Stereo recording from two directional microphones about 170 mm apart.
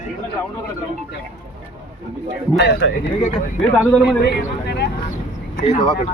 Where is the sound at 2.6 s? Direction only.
90° left.